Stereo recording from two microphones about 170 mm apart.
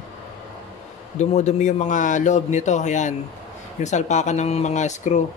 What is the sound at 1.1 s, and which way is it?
A man's voice, 45° left (ahead or behind).